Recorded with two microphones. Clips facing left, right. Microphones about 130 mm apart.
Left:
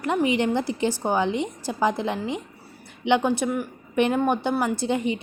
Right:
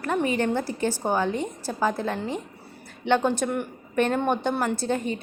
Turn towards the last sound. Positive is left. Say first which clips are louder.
# left 2 dB
turn(degrees=15)  # may be behind; listen again after turning